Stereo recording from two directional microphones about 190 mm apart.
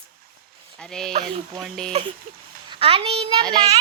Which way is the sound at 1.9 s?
30° right (ahead or behind).